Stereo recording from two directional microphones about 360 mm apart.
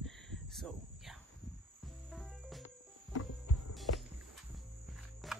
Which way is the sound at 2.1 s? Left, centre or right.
Centre.